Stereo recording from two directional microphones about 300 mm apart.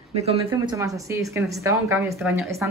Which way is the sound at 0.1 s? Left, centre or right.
Right.